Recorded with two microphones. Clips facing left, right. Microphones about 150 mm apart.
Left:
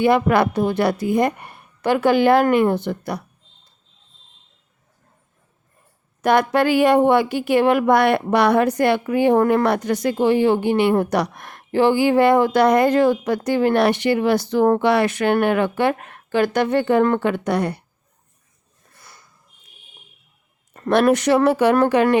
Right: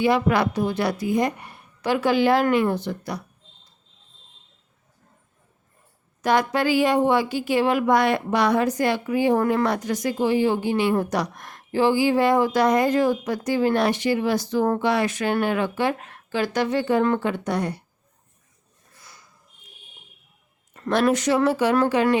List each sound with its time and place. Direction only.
0.0 s speech: 55° left (ahead or behind)
6.2 s speech: 60° left (ahead or behind)
20.9 s speech: 60° left (ahead or behind)